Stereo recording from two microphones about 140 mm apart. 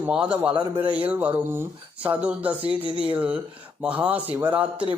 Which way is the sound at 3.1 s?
10° right (ahead or behind).